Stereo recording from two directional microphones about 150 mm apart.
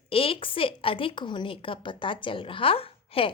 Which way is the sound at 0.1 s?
40° left (ahead or behind).